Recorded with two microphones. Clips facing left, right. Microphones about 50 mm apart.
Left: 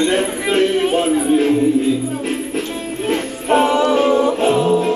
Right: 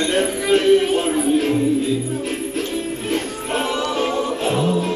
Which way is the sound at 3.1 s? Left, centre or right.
Left.